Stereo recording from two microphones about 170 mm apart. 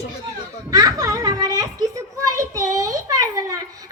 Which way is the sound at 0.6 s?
20° right (ahead or behind).